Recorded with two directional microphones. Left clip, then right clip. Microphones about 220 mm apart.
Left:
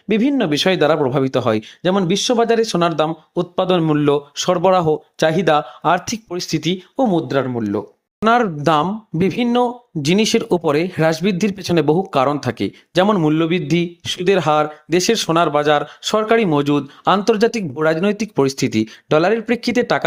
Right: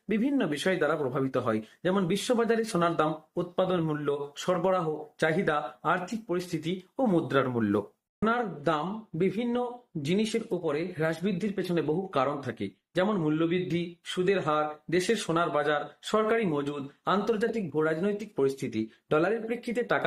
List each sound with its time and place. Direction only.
0.1 s speech: 40° left (ahead or behind); by 7.8 s 25° left (ahead or behind)
8.2 s speech: 50° left (ahead or behind)